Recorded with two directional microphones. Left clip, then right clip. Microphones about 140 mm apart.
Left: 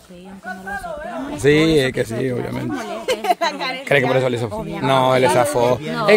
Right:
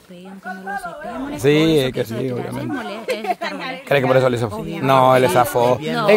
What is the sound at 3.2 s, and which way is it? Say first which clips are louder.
Speech: left 4 dB; 55° left (ahead or behind).